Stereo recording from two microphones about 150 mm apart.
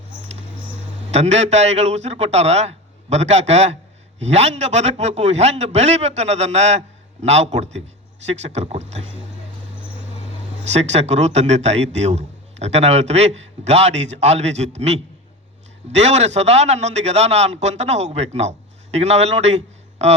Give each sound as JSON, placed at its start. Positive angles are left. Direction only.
{"t": 1.1, "sound": "a man's voice", "side_deg": -45}
{"t": 10.6, "sound": "a man's voice", "side_deg": -45}